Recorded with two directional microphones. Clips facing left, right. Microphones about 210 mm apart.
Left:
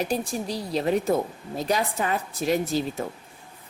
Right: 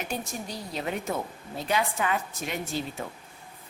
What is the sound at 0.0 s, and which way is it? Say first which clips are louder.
A woman's voice: left 7 dB; 35° left (ahead or behind).